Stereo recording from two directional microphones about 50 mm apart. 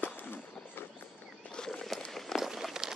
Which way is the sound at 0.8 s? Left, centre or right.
Left.